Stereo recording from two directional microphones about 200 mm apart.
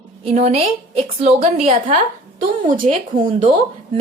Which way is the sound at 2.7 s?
40° right (ahead or behind).